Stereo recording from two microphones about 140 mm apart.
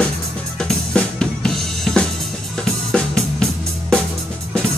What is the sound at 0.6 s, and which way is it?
Drum kit, 5° left (ahead or behind).